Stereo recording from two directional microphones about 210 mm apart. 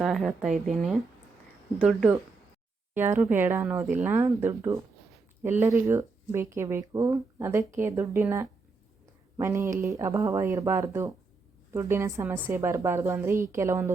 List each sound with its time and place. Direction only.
0.0 s a woman's voice: centre (ahead or behind)